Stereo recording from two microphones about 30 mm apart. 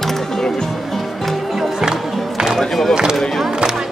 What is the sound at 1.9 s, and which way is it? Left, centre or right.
Music, right.